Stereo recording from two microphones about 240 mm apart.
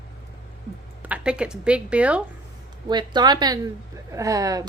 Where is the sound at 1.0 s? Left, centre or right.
Centre.